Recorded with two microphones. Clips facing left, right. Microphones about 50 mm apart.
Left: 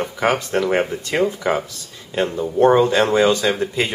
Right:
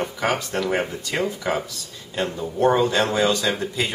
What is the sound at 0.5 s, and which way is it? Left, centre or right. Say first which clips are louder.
Speech: left 5 dB; left.